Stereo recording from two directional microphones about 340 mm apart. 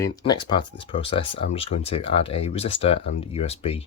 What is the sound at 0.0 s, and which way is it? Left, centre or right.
Speech, centre.